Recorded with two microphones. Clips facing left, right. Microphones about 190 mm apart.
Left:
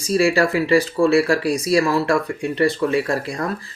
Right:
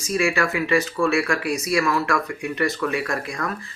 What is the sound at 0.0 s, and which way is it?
Speech, 35° left (ahead or behind).